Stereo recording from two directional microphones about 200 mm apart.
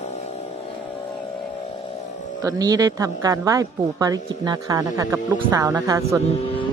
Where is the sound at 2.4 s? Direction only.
20° right (ahead or behind).